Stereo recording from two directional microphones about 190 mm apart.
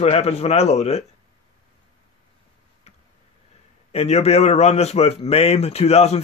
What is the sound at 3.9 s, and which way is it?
Speech, 35° left (ahead or behind).